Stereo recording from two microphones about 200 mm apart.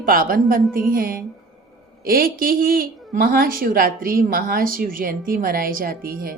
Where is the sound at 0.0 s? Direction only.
45° right (ahead or behind).